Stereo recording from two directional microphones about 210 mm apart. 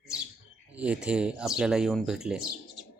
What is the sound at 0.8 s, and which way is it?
Speech, 5° right (ahead or behind).